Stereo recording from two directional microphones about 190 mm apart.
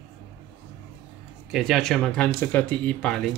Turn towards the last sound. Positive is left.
turn(degrees=5)  # may be behind; listen again after turning